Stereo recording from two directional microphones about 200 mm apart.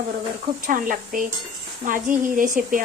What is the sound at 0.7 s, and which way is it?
A woman's voice, 45° right (ahead or behind).